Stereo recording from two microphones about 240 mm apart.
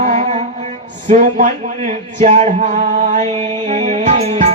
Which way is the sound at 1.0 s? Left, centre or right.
Right.